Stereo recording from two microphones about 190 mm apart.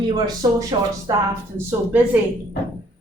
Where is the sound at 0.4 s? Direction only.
20° right (ahead or behind).